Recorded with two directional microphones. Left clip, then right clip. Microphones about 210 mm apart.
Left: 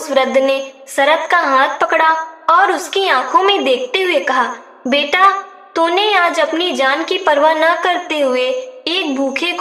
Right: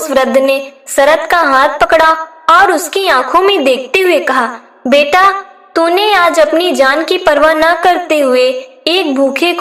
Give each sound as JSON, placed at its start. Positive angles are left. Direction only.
{"t": 0.1, "sound": "a woman's voice", "side_deg": -25}